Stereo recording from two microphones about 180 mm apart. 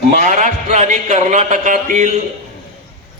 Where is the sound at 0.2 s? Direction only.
45° right (ahead or behind).